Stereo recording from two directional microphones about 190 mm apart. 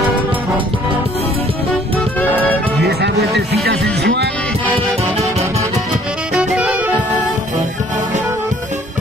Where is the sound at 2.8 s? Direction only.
60° right (ahead or behind).